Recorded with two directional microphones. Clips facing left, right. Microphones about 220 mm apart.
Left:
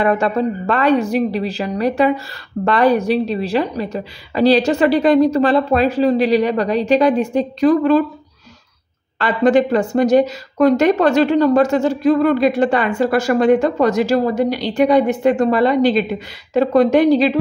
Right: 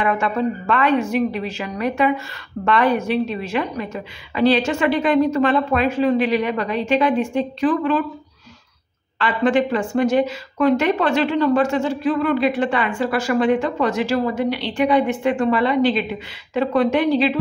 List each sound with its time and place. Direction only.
0.0 s speech: 35° left (ahead or behind)
9.2 s speech: 40° left (ahead or behind)